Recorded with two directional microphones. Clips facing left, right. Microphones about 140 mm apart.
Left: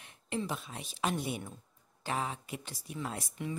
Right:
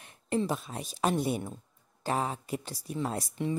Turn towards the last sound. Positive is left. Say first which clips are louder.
# right 6 dB
turn(degrees=-35)  # may be behind; listen again after turning